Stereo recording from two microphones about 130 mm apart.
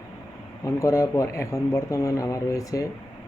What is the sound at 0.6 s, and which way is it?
A man's voice, 25° left (ahead or behind).